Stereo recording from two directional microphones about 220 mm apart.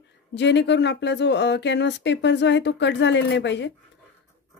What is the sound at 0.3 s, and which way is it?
Speech, 50° left (ahead or behind).